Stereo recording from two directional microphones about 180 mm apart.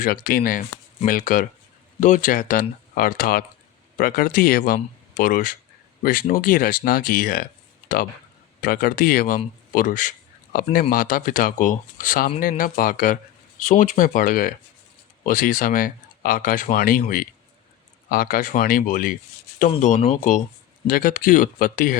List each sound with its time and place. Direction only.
0.0 s speech: 50° left (ahead or behind)
8.6 s speech: 55° left (ahead or behind)
20.8 s speech: 55° left (ahead or behind)